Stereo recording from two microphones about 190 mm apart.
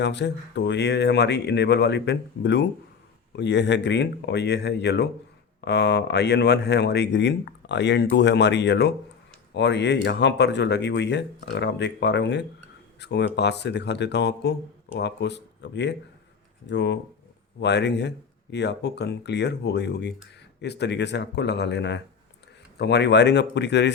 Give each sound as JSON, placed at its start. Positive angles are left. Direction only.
{"t": 0.0, "sound": "speech", "side_deg": 65}